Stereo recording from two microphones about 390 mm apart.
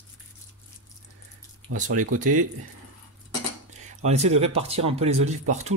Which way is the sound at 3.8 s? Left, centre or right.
Centre.